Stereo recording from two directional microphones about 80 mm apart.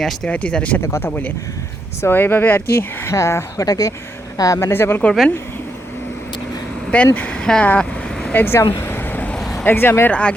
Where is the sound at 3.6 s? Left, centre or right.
Left.